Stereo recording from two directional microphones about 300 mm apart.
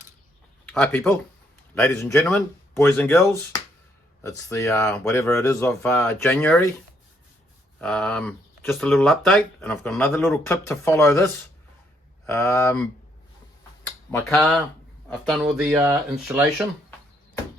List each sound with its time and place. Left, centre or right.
0.6 s speech: centre
7.8 s speech: centre